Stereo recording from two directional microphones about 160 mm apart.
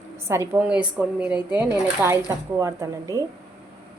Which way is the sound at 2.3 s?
20° right (ahead or behind).